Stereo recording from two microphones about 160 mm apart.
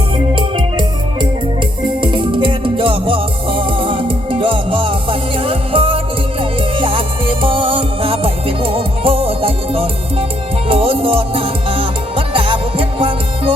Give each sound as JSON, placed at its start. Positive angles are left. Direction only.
{"t": 0.3, "sound": "music", "side_deg": -30}